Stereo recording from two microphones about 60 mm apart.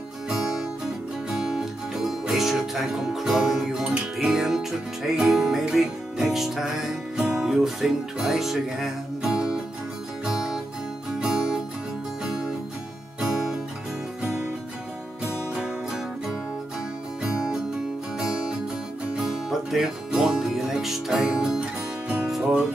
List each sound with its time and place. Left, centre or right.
0.3 s music: centre
3.9 s music: centre
4.3 s music: centre
15.5 s music: centre
19.1 s music: centre
21.5 s music: centre